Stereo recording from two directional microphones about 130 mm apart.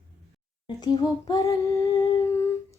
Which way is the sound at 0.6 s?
35° left (ahead or behind).